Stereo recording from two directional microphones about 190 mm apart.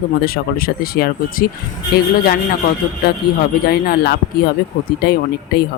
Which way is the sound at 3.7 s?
50° left (ahead or behind).